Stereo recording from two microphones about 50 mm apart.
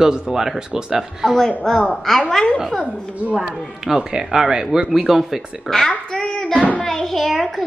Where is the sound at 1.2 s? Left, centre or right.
Centre.